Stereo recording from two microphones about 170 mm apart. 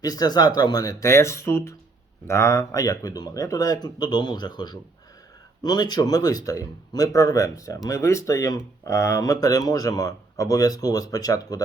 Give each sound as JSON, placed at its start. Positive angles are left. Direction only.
{"t": 0.0, "sound": "speech", "side_deg": 20}